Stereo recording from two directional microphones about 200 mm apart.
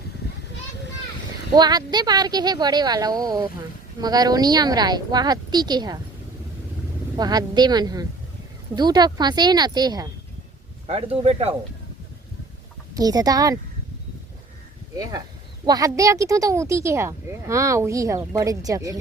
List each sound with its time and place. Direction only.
1.5 s speech: 20° right (ahead or behind)
7.2 s speech: 20° right (ahead or behind)
12.9 s speech: 20° right (ahead or behind)
15.6 s speech: 20° right (ahead or behind)